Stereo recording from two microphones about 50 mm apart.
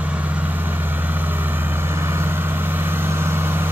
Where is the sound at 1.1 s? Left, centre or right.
Right.